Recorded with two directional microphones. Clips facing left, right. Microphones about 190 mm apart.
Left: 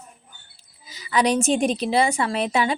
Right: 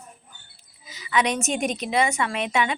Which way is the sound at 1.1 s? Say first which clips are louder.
Left 4 dB; 35° left (ahead or behind).